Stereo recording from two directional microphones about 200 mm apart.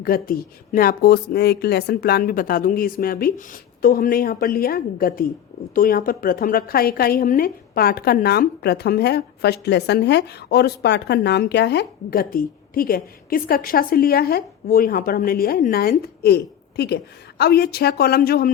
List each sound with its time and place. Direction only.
0.0 s a woman's voice: 45° left (ahead or behind)